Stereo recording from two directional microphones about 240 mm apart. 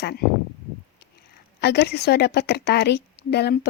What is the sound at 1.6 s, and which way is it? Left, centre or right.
A woman's voice, left.